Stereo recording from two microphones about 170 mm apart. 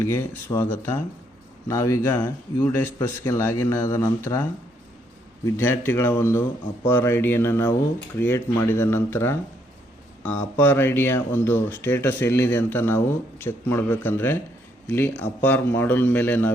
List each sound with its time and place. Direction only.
0.0 s speech: 15° left (ahead or behind)
5.5 s speech: 15° left (ahead or behind)